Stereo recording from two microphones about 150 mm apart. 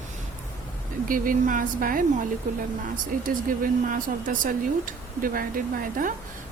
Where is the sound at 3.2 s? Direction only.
65° right (ahead or behind).